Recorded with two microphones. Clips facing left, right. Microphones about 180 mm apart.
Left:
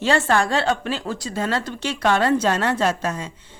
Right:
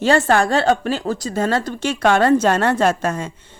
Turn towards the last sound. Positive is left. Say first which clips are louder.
# right 4 dB
turn(degrees=-50)  # may be behind; listen again after turning